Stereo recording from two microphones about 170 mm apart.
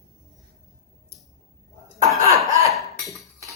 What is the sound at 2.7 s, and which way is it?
Dishes, centre (ahead or behind).